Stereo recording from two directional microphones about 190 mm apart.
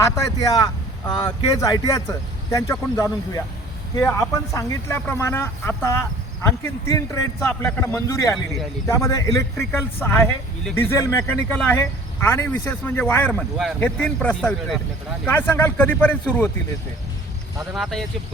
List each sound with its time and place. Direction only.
0.0 s speech: 15° left (ahead or behind)
17.7 s speech: centre (ahead or behind)